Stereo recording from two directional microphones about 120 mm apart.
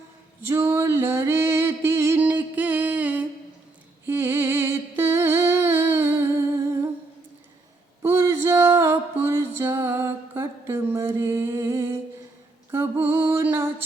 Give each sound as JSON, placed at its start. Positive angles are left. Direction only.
{"t": 0.4, "sound": "music", "side_deg": -20}
{"t": 4.0, "sound": "humming", "side_deg": -20}
{"t": 8.0, "sound": "music", "side_deg": -25}